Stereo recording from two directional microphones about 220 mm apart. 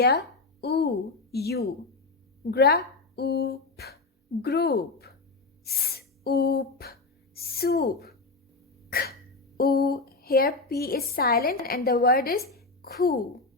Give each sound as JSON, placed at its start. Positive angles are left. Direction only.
{"t": 0.0, "sound": "a woman's voice", "side_deg": 45}
{"t": 5.6, "sound": "a sound", "side_deg": 45}
{"t": 8.9, "sound": "cough", "side_deg": 45}
{"t": 9.6, "sound": "a woman's voice", "side_deg": 45}